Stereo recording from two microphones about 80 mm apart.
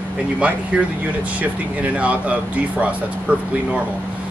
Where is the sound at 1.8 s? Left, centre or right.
Centre.